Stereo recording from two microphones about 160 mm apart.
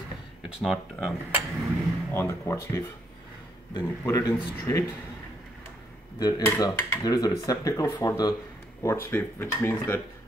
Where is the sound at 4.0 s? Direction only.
20° left (ahead or behind).